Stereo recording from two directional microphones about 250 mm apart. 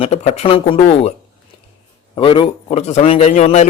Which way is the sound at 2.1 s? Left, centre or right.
Centre.